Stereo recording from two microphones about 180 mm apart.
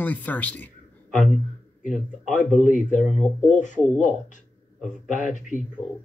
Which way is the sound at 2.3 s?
45° left (ahead or behind).